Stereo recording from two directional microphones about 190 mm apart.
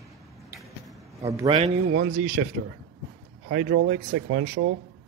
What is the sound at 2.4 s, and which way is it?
Speech, 45° right (ahead or behind).